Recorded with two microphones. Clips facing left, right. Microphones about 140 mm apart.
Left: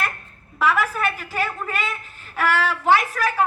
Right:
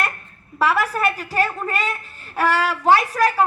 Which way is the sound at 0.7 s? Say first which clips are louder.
Right 1 dB; 35° right (ahead or behind).